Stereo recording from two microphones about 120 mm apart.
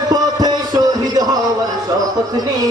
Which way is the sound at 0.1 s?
35° right (ahead or behind).